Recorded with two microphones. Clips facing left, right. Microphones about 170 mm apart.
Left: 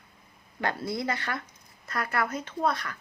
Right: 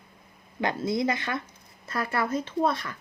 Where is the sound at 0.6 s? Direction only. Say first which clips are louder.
Right 4 dB; 20° right (ahead or behind).